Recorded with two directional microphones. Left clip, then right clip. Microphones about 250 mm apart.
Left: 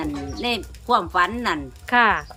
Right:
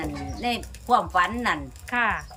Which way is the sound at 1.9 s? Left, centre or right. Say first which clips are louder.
Left 7 dB; left.